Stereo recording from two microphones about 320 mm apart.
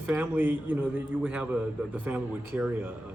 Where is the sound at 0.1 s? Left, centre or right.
Centre.